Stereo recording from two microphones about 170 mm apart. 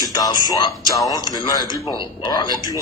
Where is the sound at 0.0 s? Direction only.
20° left (ahead or behind).